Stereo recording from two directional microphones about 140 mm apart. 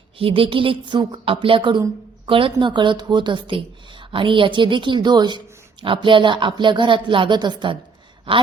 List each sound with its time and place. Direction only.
0.2 s speech: 40° right (ahead or behind)